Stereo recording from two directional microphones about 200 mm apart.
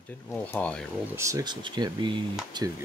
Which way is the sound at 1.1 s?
15° right (ahead or behind).